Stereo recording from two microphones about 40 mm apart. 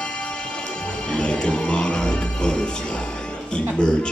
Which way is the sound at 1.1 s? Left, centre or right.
Left.